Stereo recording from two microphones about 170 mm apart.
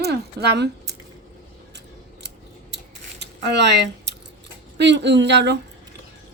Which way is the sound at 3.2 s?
90° right.